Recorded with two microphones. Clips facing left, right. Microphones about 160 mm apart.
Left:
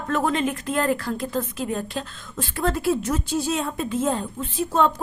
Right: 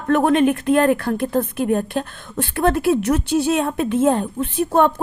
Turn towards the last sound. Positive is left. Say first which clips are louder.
# right 5 dB
turn(degrees=-60)  # may be behind; listen again after turning